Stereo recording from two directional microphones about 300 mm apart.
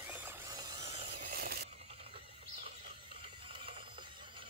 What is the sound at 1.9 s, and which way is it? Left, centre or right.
Ratchet, centre.